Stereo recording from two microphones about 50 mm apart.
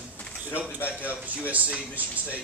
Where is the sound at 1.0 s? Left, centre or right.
Right.